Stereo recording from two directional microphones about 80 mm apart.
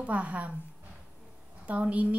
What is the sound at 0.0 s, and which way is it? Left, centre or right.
Speech, centre.